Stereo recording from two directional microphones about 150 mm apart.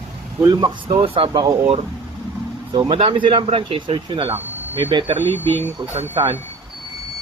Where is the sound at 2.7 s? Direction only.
35° right (ahead or behind).